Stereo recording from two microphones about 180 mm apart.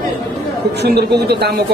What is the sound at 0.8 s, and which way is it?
Speech, 65° right (ahead or behind).